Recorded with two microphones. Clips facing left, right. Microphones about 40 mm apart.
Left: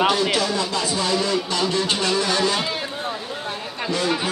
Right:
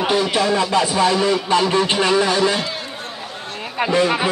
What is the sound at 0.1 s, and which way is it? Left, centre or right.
Speech, right.